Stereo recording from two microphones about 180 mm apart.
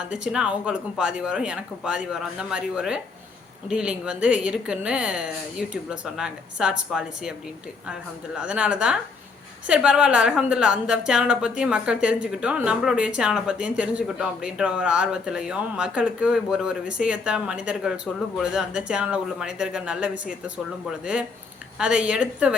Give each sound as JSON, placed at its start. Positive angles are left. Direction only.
{"t": 0.1, "sound": "a woman's voice", "side_deg": -5}
{"t": 8.4, "sound": "a woman's voice", "side_deg": -5}